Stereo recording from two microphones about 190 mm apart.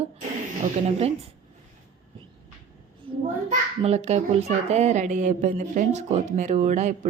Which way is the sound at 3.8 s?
35° right (ahead or behind).